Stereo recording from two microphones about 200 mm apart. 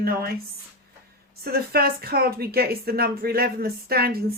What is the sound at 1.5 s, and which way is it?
Speech, 50° right (ahead or behind).